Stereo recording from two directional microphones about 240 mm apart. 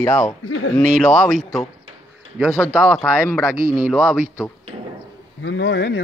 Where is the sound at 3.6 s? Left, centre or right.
Right.